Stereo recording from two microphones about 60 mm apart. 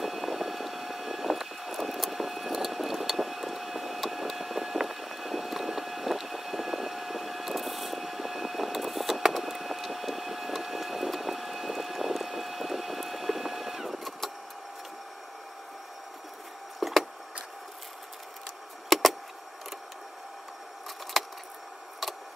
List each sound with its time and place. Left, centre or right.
0.0 s vehicle: centre
16.8 s wood: centre
18.9 s a sound: centre
21.2 s keys jangling: centre
22.0 s vehicle: centre